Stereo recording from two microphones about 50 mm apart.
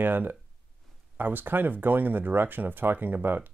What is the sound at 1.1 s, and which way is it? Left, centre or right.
Speech, right.